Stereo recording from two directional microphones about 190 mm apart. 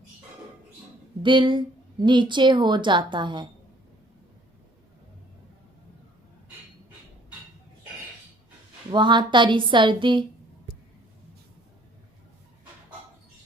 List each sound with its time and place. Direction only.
1.2 s speech: 25° right (ahead or behind)
8.9 s speech: 25° right (ahead or behind)